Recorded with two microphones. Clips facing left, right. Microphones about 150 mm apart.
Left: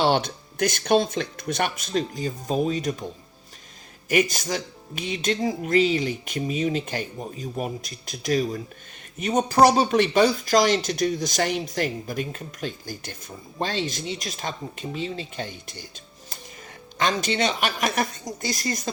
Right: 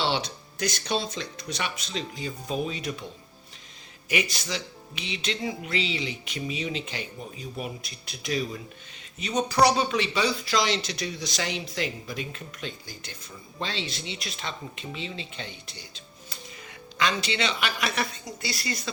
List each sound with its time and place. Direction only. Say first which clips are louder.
0.0 s speech: left 6 dB; 50° left (ahead or behind)
4.1 s speech: left 7 dB; 45° left (ahead or behind)
17.0 s speech: left 4 dB; 45° left (ahead or behind)